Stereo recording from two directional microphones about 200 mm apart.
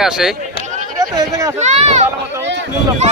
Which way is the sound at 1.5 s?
35° right (ahead or behind).